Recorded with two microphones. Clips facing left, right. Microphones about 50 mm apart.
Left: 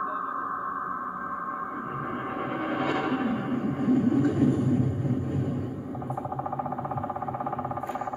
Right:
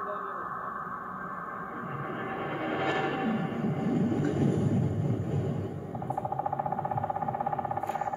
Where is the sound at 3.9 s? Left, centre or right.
Right.